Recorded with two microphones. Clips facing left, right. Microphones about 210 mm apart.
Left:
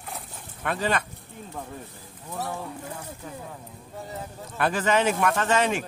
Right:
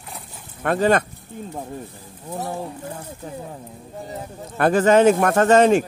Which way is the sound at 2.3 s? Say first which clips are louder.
Right 5 dB; 30° right (ahead or behind).